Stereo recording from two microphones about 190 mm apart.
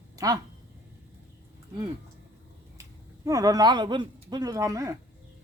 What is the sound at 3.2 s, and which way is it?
Speech, 20° right (ahead or behind).